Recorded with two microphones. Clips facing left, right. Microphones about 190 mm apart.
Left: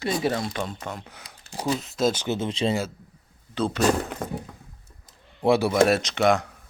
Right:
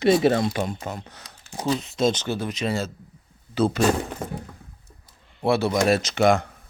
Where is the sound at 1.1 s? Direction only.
10° left (ahead or behind).